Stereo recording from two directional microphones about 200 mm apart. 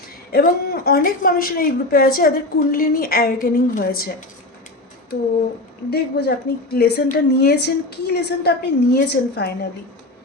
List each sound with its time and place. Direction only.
0.3 s a woman's voice: 50° left (ahead or behind)
5.9 s a woman's voice: 55° left (ahead or behind)